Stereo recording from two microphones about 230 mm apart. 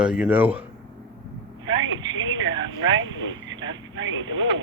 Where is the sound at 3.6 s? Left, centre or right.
Right.